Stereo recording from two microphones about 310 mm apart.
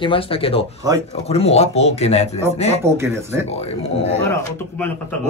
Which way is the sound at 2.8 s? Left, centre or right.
Right.